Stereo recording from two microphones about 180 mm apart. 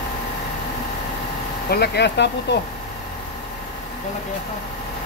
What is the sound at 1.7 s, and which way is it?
Speech, 65° left (ahead or behind).